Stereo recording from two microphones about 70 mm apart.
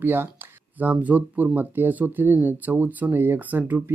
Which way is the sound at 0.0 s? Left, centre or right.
Right.